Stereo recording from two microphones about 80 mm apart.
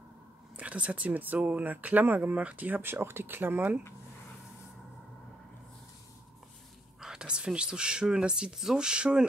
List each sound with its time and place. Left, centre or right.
0.6 s speech: centre
7.0 s speech: centre